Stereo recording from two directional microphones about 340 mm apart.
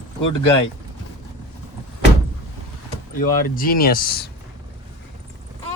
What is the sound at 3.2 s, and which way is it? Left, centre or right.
Speech, left.